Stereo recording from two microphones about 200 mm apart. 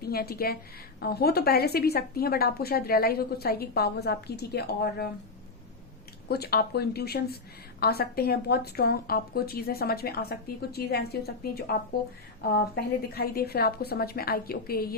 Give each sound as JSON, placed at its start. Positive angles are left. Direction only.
{"t": 0.0, "sound": "a woman's voice", "side_deg": 50}
{"t": 6.2, "sound": "speech", "side_deg": 50}